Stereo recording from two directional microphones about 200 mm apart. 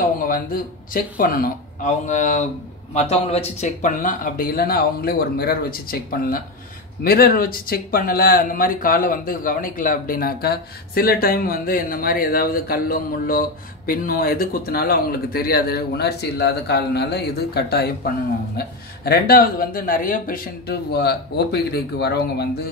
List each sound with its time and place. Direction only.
0.9 s speech: 45° left (ahead or behind)